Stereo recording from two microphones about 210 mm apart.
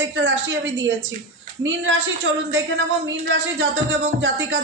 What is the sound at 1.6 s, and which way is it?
Speech, 60° right (ahead or behind).